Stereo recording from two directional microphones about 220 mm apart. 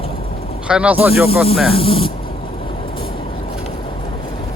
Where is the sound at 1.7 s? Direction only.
25° left (ahead or behind).